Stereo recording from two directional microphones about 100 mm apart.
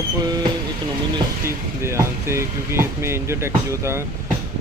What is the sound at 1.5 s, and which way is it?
Speech, 25° right (ahead or behind).